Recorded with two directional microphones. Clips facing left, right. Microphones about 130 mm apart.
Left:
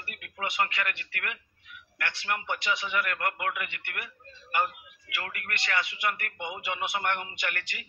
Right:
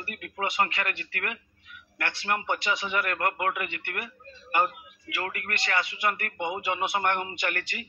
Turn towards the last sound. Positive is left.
turn(degrees=-35)  # may be behind; listen again after turning